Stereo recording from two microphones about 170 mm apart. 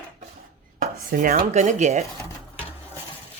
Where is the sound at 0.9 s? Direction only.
55° right (ahead or behind).